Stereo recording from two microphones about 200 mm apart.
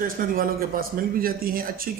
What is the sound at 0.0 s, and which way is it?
A man's voice, 45° right (ahead or behind).